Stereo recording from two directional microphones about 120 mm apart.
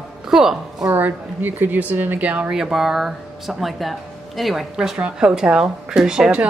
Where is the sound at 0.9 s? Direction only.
15° right (ahead or behind).